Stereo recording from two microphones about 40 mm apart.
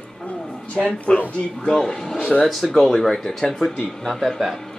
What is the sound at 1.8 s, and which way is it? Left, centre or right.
Speech, centre.